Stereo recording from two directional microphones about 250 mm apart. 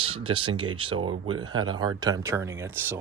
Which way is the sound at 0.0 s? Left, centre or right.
Right.